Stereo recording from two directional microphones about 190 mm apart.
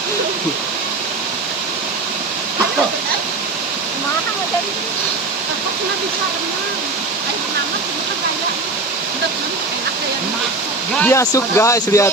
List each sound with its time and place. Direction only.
11.0 s speech: 15° left (ahead or behind)